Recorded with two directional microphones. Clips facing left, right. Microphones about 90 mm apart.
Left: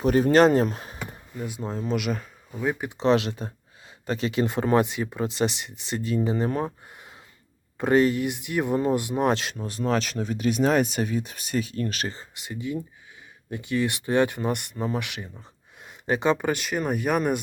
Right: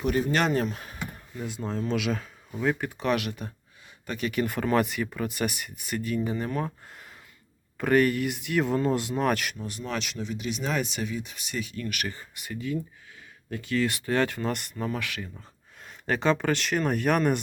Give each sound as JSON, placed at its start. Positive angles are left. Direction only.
{"t": 0.0, "sound": "speech", "side_deg": 40}
{"t": 1.4, "sound": "speech", "side_deg": 5}
{"t": 3.0, "sound": "speech", "side_deg": 25}